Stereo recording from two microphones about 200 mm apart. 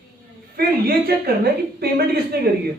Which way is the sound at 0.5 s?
50° right (ahead or behind).